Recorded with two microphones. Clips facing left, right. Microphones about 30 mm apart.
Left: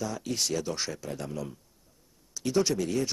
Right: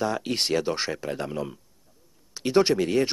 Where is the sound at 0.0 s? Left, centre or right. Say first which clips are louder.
Right 6 dB; right.